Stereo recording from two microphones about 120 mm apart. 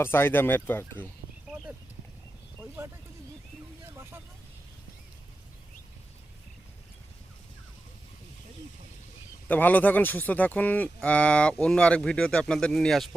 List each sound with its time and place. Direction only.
0.0 s speech: 20° left (ahead or behind)
2.6 s a sound: 20° right (ahead or behind)
3.9 s vehicle: 20° right (ahead or behind)
9.5 s speech: 15° left (ahead or behind)